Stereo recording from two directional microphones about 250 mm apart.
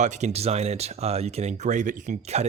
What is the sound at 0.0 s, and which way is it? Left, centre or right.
Speech, right.